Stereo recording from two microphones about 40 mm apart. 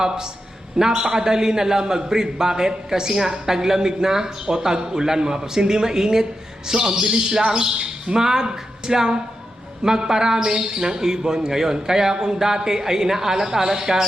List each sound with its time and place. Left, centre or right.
0.8 s a man's voice: centre